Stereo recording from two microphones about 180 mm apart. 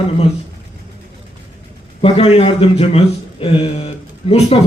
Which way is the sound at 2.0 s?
35° left (ahead or behind).